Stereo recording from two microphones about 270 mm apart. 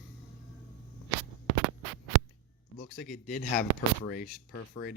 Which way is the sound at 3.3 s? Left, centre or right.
Left.